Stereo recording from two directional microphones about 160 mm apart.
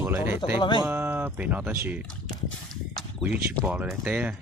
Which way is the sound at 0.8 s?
15° right (ahead or behind).